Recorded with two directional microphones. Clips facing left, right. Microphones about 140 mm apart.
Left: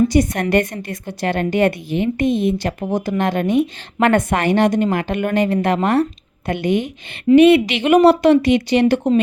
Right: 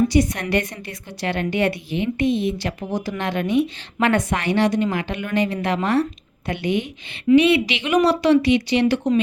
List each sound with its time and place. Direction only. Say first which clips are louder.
0.1 s a woman's voice: left 3 dB; 50° left (ahead or behind)